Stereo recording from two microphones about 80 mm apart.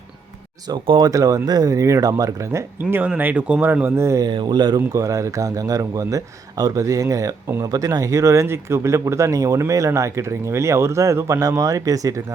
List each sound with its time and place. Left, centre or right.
0.7 s a man's voice: right
3.2 s speech: right
4.3 s speech: right
4.9 s a man's voice: right